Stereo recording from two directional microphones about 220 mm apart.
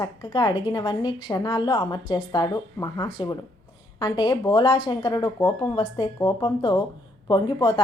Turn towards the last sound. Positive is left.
turn(degrees=20)  # may be behind; listen again after turning